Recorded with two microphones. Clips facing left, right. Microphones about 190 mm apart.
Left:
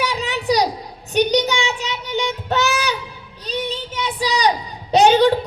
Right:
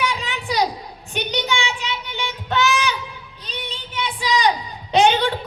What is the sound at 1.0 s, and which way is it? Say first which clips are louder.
Child singing: left 8 dB; 40° left (ahead or behind).